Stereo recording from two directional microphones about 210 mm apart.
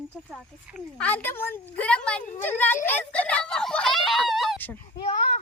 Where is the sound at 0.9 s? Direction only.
5° left (ahead or behind).